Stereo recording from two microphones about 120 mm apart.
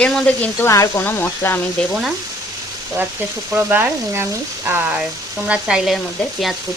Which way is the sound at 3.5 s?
15° right (ahead or behind).